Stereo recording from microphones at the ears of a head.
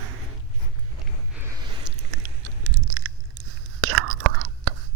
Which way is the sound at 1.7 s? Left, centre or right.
Right.